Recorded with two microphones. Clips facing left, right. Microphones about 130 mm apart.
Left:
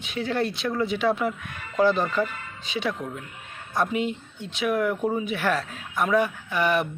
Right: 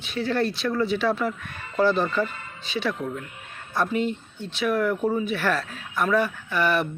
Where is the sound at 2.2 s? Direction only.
Centre (ahead or behind).